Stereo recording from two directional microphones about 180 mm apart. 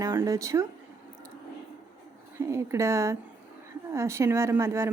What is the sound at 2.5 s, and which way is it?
A woman's voice, 15° right (ahead or behind).